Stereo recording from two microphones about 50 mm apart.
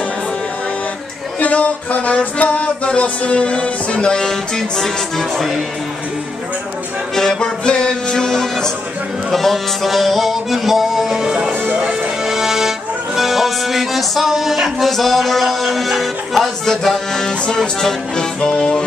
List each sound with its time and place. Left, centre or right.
1.4 s music: left; by 5.6 s centre
7.2 s music: centre
12.3 s accordion: centre